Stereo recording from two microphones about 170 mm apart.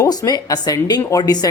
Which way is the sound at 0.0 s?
20° left (ahead or behind).